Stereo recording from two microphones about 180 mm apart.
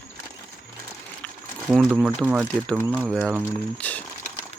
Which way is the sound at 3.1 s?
Centre (ahead or behind).